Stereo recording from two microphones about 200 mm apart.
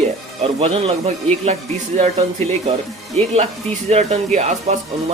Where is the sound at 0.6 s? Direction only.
30° right (ahead or behind).